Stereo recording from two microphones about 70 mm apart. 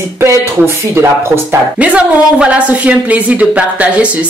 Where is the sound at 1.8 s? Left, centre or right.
Centre.